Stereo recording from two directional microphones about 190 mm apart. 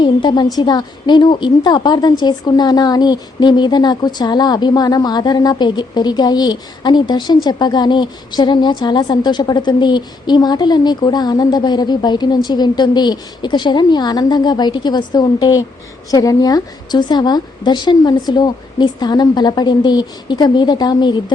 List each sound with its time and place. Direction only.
0.0 s speech: 25° left (ahead or behind)